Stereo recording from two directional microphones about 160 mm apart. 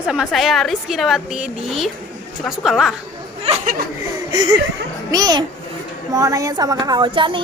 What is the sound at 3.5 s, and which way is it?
Speech, 40° right (ahead or behind).